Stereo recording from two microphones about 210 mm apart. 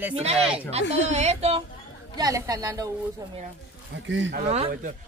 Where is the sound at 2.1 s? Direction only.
15° right (ahead or behind).